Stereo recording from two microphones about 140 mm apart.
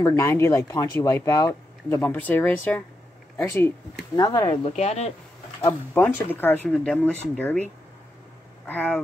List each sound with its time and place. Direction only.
0.0 s speech: 20° left (ahead or behind)
2.0 s speech: 10° left (ahead or behind); by 4.5 s 25° left (ahead or behind)
4.5 s speech: 45° left (ahead or behind)
5.6 s speech: 15° left (ahead or behind)
8.6 s speech: 10° left (ahead or behind)